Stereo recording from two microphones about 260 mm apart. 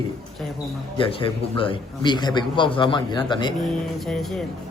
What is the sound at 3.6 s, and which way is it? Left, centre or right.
Music, centre.